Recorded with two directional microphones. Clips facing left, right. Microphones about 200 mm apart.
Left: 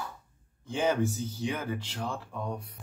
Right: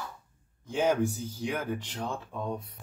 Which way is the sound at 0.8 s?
10° right (ahead or behind).